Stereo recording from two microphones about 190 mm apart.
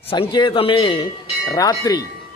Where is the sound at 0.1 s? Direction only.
25° left (ahead or behind).